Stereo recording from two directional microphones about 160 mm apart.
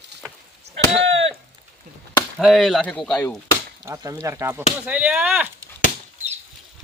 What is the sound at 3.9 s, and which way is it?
Speech, 20° right (ahead or behind).